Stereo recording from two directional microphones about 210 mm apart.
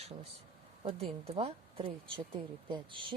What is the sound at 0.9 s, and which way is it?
Speech, 30° right (ahead or behind).